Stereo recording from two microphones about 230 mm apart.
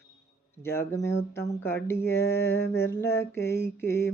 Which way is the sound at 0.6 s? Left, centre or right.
Centre.